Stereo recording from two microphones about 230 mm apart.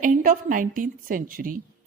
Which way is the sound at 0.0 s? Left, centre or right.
Right.